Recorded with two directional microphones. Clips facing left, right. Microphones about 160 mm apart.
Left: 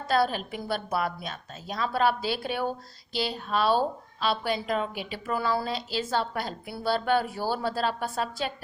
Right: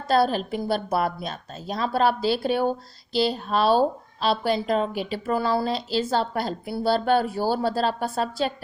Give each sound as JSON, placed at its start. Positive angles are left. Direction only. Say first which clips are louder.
{"t": 0.1, "sound": "a woman's voice", "louder": "right 5 dB", "side_deg": -35}